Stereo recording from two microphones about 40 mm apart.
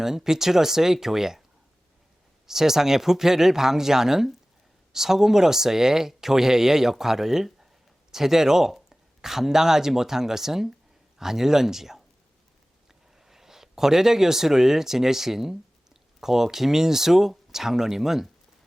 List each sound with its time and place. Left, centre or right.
0.0 s speech: centre
2.5 s speech: centre